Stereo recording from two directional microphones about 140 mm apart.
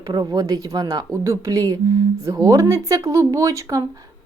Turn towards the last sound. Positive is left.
turn(degrees=-25)  # may be behind; listen again after turning